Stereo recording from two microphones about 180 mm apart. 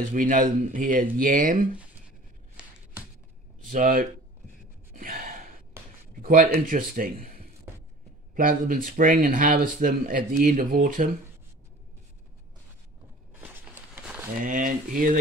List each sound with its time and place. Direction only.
0.1 s speech: 50° right (ahead or behind)
3.6 s speech: 50° right (ahead or behind)
4.9 s gasp: 50° right (ahead or behind)
6.2 s speech: 55° right (ahead or behind)
14.4 s speech: 50° right (ahead or behind)